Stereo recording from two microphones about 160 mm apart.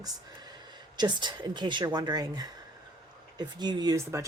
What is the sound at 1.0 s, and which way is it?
Speech, 30° right (ahead or behind).